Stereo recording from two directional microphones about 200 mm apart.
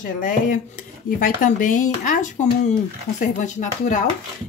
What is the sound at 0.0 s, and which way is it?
Speech, 40° left (ahead or behind).